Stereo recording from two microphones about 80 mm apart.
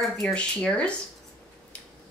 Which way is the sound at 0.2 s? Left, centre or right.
Centre.